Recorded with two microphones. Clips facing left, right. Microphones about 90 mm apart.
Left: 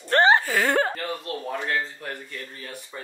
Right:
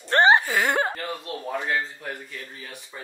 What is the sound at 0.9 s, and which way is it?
Speech, 5° right (ahead or behind).